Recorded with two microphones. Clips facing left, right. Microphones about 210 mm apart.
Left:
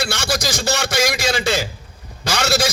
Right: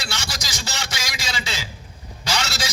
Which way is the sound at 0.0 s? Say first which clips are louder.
Left 11 dB; 55° left (ahead or behind).